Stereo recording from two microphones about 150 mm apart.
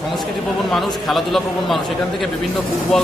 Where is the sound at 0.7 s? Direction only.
Centre (ahead or behind).